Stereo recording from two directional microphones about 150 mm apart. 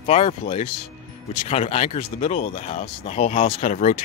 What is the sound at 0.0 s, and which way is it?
Speech, 45° left (ahead or behind).